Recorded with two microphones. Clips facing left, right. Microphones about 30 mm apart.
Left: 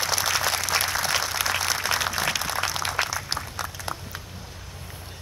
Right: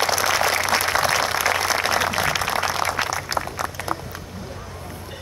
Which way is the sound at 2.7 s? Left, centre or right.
Right.